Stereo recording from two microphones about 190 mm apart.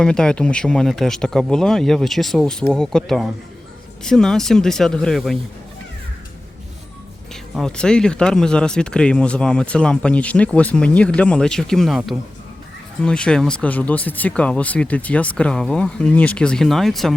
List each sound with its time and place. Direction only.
0.0 s speech: 5° left (ahead or behind)
7.5 s speech: 5° left (ahead or behind)